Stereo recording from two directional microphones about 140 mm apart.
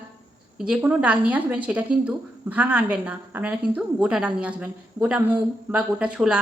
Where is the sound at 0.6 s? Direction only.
10° right (ahead or behind).